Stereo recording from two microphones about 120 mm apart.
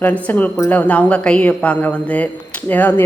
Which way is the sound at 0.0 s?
15° left (ahead or behind).